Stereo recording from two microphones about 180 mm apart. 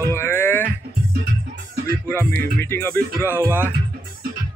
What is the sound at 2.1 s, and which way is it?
Speech, 10° left (ahead or behind).